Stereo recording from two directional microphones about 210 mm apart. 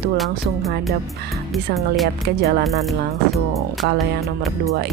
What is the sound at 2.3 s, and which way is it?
Speech, 55° right (ahead or behind).